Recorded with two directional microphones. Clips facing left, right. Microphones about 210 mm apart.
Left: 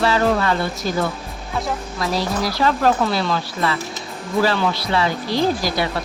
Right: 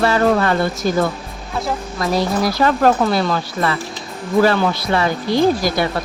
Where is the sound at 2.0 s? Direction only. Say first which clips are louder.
Right 4 dB; 50° right (ahead or behind).